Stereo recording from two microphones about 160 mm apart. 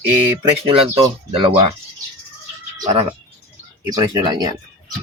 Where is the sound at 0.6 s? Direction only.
35° right (ahead or behind).